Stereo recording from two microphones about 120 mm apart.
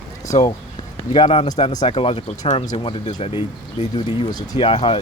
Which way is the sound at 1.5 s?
70° left (ahead or behind).